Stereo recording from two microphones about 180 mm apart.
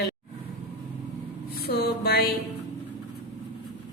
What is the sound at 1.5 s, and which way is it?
Music, 60° left (ahead or behind).